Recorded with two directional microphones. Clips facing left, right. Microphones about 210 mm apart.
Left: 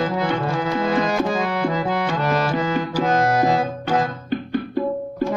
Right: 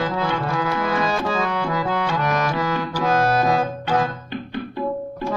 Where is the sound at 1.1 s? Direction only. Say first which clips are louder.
Left 2 dB; 15° left (ahead or behind); by 2.7 s 30° left (ahead or behind).